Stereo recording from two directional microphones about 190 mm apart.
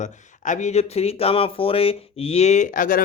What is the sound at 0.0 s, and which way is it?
Speech, 40° left (ahead or behind).